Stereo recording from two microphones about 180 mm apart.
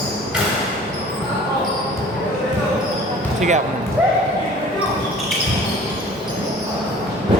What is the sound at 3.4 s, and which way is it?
Speech, 40° right (ahead or behind).